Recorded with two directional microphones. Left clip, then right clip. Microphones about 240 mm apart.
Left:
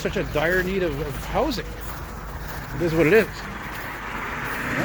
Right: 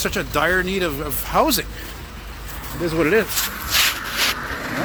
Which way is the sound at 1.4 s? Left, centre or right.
Right.